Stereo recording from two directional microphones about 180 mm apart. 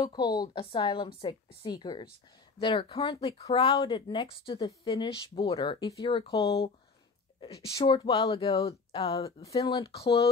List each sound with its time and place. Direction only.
0.0 s a woman's voice: 25° left (ahead or behind)
7.3 s a woman's voice: 20° left (ahead or behind)
9.6 s a woman's voice: 20° left (ahead or behind)